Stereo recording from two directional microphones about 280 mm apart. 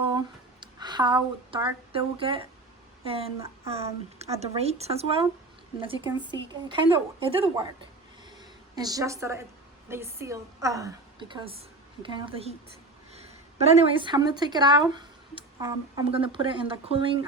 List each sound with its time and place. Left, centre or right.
0.1 s a woman's voice: centre
8.7 s a woman's voice: centre